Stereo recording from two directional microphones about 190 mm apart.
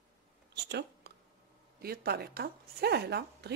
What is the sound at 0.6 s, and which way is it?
A woman's voice, 60° right (ahead or behind).